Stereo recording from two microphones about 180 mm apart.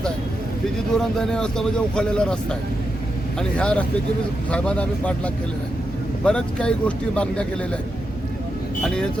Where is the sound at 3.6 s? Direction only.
5° left (ahead or behind).